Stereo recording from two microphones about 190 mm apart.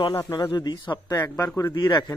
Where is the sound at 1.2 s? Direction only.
10° left (ahead or behind).